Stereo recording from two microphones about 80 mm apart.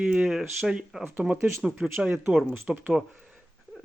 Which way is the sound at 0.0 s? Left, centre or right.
Centre.